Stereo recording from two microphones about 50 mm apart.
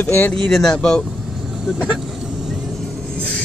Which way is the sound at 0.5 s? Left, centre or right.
Centre.